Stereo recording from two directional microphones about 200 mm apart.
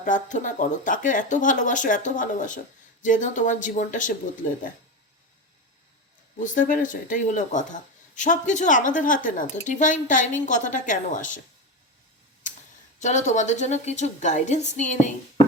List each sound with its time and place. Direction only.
0.0 s speech: 40° left (ahead or behind)
6.4 s speech: 40° left (ahead or behind)
13.0 s speech: 35° left (ahead or behind)